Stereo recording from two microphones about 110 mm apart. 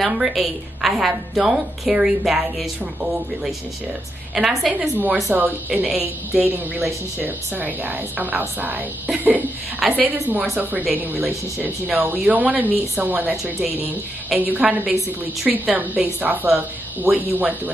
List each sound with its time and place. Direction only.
0.0 s a woman's voice: centre (ahead or behind)
4.9 s speech: 15° right (ahead or behind)